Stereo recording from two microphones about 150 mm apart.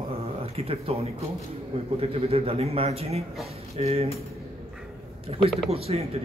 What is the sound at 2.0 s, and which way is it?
A man's voice, 40° right (ahead or behind).